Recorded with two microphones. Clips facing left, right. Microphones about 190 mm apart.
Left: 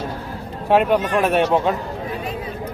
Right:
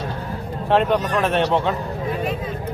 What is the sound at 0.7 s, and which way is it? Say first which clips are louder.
Speech: left 2 dB; 10° left (ahead or behind).